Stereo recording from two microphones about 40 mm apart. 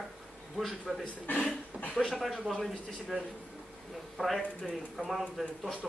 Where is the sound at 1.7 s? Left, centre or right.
Right.